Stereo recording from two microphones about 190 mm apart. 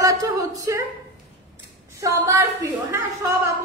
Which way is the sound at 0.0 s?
20° right (ahead or behind).